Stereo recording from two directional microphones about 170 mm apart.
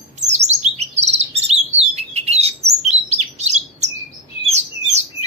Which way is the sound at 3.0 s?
40° right (ahead or behind).